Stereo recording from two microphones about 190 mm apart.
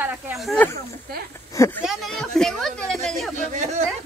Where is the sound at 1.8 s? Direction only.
Centre (ahead or behind).